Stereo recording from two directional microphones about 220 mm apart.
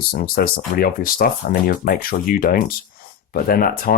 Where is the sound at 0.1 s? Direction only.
45° left (ahead or behind).